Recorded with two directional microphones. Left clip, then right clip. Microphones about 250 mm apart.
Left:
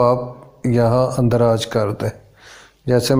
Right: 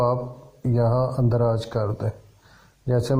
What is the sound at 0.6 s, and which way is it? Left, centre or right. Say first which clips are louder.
Speech: left 7 dB; left.